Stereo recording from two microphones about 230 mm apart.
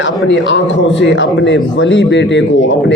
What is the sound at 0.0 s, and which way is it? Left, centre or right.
A man's voice, left.